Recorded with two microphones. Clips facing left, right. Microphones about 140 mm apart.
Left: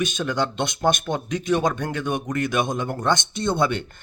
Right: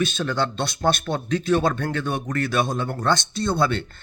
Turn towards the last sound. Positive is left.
turn(degrees=15)  # may be behind; listen again after turning